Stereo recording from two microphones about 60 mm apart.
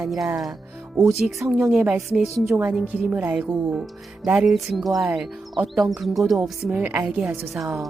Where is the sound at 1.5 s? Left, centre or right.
Centre.